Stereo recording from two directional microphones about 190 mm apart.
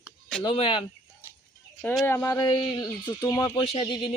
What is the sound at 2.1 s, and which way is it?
Speech, 15° left (ahead or behind).